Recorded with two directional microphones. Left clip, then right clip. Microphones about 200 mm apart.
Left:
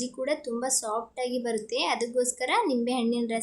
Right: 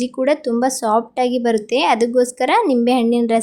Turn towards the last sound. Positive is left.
turn(degrees=-30)  # may be behind; listen again after turning